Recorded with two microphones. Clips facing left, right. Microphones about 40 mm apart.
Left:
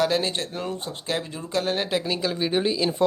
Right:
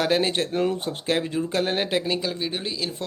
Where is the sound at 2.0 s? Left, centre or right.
Centre.